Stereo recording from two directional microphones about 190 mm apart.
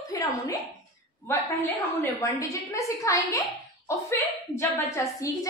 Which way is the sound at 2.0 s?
15° left (ahead or behind).